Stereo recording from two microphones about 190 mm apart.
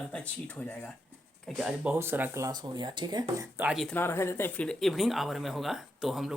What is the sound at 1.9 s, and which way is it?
Speech, 10° right (ahead or behind).